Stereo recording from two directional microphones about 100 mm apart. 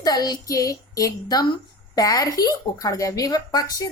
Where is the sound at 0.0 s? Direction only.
40° left (ahead or behind).